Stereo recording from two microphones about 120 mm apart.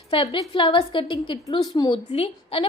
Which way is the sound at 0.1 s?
45° left (ahead or behind).